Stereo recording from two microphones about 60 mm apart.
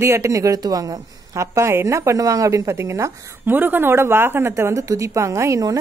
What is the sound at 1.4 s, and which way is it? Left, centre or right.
A woman's voice, right.